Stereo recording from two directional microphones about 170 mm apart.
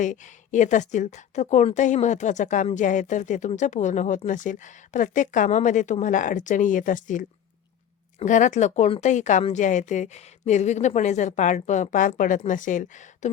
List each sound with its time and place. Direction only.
0.0 s a woman's voice: 45° left (ahead or behind)